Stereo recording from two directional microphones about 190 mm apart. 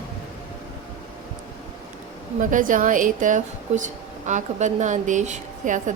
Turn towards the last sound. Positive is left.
turn(degrees=-40)  # may be behind; listen again after turning